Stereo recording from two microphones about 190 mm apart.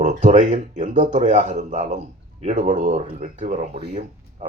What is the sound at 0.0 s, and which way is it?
Speech, 40° right (ahead or behind).